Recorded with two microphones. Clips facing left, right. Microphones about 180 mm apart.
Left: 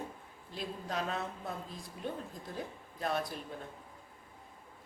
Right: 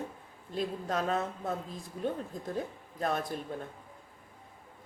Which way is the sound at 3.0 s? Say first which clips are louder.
Right 3 dB; 45° right (ahead or behind).